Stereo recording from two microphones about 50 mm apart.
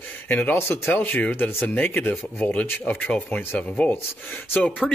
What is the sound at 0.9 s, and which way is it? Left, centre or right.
Speech, left.